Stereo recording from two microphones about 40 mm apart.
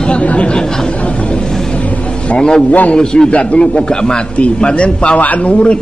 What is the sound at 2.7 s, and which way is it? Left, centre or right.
Speech, left.